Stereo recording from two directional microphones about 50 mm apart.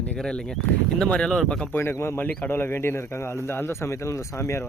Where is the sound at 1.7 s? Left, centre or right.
Left.